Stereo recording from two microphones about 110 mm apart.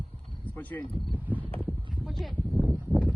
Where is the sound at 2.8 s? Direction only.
15° left (ahead or behind).